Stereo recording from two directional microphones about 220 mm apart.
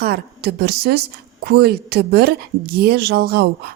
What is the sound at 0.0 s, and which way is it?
A woman's voice, 45° right (ahead or behind).